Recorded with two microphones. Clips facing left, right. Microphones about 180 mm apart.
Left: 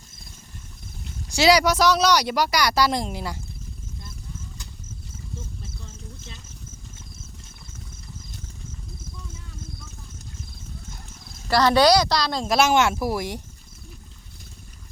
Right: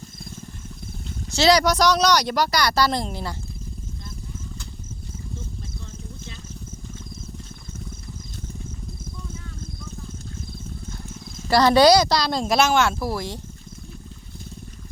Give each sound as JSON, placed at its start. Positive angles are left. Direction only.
{"t": 1.3, "sound": "speech", "side_deg": 10}
{"t": 11.4, "sound": "speech", "side_deg": -10}
{"t": 12.5, "sound": "speech", "side_deg": 15}